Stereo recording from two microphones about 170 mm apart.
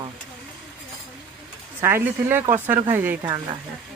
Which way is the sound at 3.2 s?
25° right (ahead or behind).